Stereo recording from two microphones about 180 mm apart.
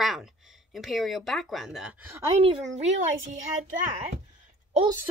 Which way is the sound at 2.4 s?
30° right (ahead or behind).